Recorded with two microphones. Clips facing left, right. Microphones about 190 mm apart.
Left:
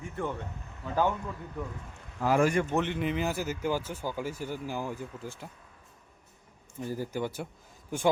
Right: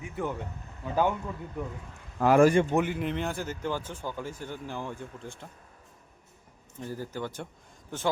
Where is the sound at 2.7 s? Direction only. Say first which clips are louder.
Right 1 dB; 5° right (ahead or behind).